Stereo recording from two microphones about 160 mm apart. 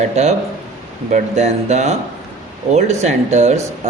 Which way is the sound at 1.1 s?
45° right (ahead or behind).